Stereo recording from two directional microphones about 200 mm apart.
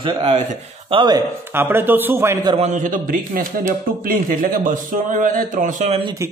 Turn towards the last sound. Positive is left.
turn(degrees=-30)  # may be behind; listen again after turning